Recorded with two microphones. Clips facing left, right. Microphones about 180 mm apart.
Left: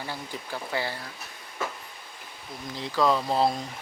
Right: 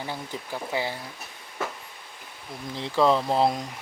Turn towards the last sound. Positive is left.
turn(degrees=-20)  # may be behind; listen again after turning